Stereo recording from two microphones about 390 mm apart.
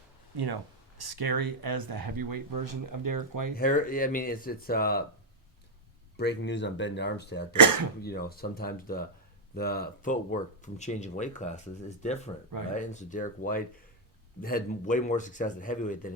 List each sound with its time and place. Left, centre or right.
0.3 s speech: right
3.5 s speech: left
6.1 s speech: left
7.5 s speech: right
8.0 s speech: left